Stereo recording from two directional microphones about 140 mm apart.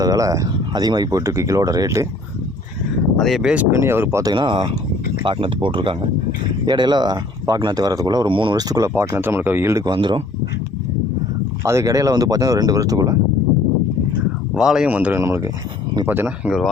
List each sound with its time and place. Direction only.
0.0 s speech: 25° right (ahead or behind)
3.2 s speech: centre (ahead or behind)
3.5 s speech: 15° right (ahead or behind); by 10.2 s 35° right (ahead or behind)
11.6 s speech: 20° right (ahead or behind)
14.5 s speech: 5° right (ahead or behind)